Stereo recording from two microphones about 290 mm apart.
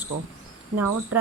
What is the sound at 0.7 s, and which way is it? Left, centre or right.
Speech, right.